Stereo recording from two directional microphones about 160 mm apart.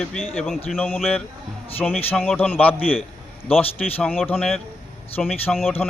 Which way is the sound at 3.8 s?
5° left (ahead or behind).